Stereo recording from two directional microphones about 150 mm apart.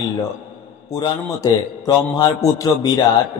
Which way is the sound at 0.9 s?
25° left (ahead or behind).